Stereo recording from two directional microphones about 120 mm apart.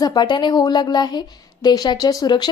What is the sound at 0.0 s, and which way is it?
A woman's voice, 35° left (ahead or behind).